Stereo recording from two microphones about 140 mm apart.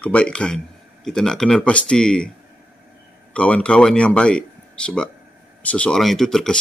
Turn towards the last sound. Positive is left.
turn(degrees=5)  # may be behind; listen again after turning